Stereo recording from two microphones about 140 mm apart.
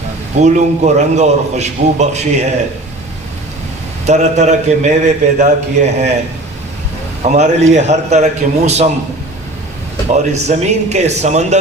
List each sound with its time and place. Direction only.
0.3 s a man's voice: 55° right (ahead or behind)
4.0 s a man's voice: 55° right (ahead or behind)
7.3 s a man's voice: 55° right (ahead or behind)
10.3 s a man's voice: 50° right (ahead or behind)